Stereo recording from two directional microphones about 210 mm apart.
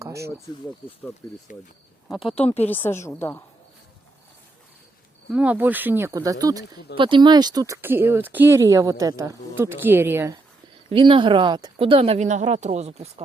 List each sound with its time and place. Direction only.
0.0 s insect: 15° right (ahead or behind)
1.2 s a woman's voice: 20° left (ahead or behind)
2.6 s a woman's voice: 10° left (ahead or behind)
5.3 s speech: 5° right (ahead or behind)
10.8 s speech: 25° right (ahead or behind)